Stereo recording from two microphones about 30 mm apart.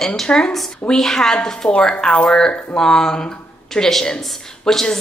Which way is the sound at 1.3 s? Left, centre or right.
Left.